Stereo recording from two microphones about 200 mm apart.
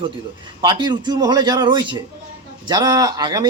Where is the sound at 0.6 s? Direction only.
20° right (ahead or behind).